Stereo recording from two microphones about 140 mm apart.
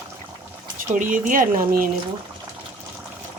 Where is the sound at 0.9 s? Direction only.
65° right (ahead or behind).